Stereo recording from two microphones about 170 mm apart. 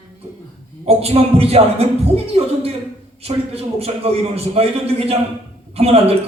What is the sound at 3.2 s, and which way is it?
A man's voice, 35° right (ahead or behind).